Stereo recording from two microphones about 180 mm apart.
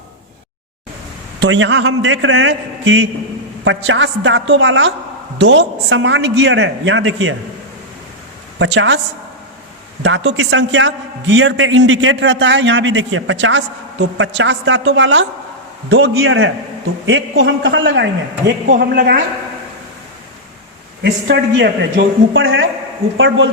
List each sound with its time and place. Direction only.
1.4 s a man's voice: 90° right
8.5 s a woman's voice: 90° right
10.0 s a man's voice: 90° right
18.9 s a woman's voice: 70° right (ahead or behind)
21.0 s a man's voice: 70° right (ahead or behind); by 23.5 s 90° right